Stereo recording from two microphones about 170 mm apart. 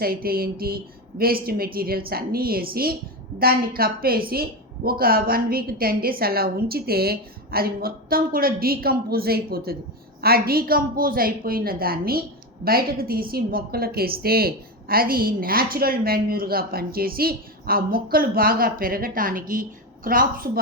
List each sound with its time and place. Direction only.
0.0 s a woman's voice: 60° right (ahead or behind)